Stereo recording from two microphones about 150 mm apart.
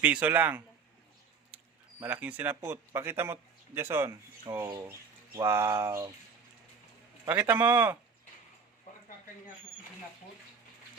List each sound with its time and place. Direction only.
0.0 s speech: 10° right (ahead or behind)
2.0 s speech: 10° right (ahead or behind)
7.3 s speech: 10° right (ahead or behind)
8.9 s a sound: 60° left (ahead or behind)